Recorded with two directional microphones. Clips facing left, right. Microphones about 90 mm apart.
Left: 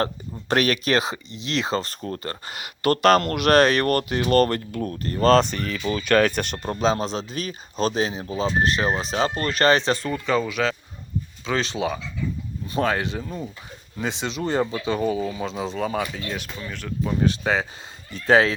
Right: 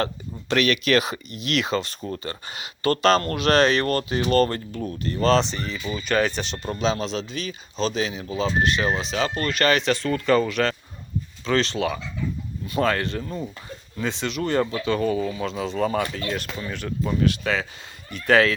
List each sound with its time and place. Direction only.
0.5 s speech: 35° left (ahead or behind); by 5.7 s 55° left (ahead or behind)
5.9 s speech: 65° left (ahead or behind); by 10.0 s 30° left (ahead or behind)
10.2 s speech: 5° left (ahead or behind)
13.2 s speech: centre (ahead or behind)
14.0 s speech: 20° left (ahead or behind)
15.3 s speech: 20° left (ahead or behind)
15.7 s speech: 5° left (ahead or behind)
17.2 s speech: 25° left (ahead or behind)